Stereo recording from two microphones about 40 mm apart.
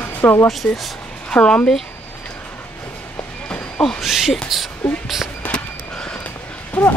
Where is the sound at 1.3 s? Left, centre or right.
Left.